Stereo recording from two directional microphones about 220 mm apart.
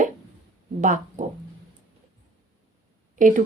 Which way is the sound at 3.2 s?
35° right (ahead or behind).